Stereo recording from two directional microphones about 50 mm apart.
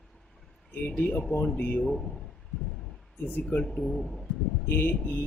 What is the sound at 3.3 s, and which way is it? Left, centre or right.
Speech, left.